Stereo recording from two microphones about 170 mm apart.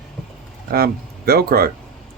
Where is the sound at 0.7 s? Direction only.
65° right (ahead or behind).